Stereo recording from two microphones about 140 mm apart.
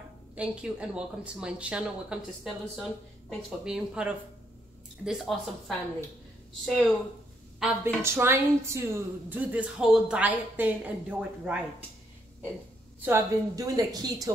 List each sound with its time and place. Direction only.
0.4 s a woman's voice: 5° right (ahead or behind)
7.6 s a woman's voice: 20° right (ahead or behind)
13.0 s speech: 20° right (ahead or behind)